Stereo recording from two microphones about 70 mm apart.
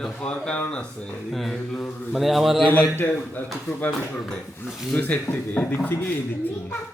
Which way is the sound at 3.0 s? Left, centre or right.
Left.